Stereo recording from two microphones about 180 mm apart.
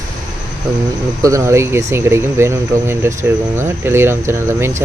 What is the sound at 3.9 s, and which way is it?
Speech, 15° right (ahead or behind).